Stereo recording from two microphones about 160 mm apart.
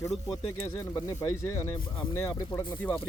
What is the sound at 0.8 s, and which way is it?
Speech, 20° left (ahead or behind).